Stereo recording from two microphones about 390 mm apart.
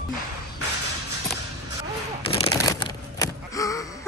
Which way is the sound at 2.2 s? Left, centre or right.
Centre.